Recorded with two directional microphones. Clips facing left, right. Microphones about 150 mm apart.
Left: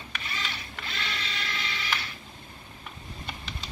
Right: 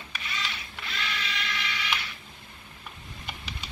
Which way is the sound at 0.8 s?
35° left (ahead or behind).